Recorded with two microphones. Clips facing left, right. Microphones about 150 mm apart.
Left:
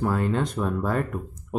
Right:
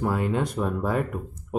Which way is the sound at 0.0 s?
10° right (ahead or behind).